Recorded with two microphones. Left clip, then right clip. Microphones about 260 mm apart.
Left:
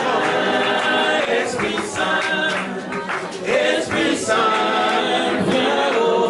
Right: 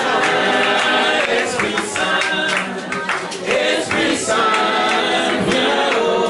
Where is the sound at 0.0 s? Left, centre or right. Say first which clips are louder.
Right 3 dB; centre.